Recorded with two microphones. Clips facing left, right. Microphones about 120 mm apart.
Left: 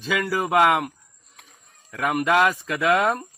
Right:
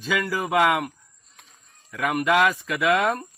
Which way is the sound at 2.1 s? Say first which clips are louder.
Left 1 dB; 30° left (ahead or behind).